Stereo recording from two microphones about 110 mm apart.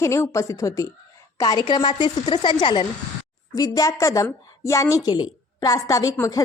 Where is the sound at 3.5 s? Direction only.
35° left (ahead or behind).